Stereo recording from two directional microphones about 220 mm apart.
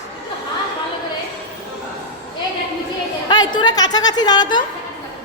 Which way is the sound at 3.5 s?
20° left (ahead or behind).